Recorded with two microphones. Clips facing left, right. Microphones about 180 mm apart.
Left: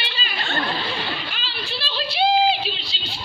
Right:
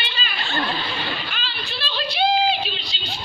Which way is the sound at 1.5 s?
30° left (ahead or behind).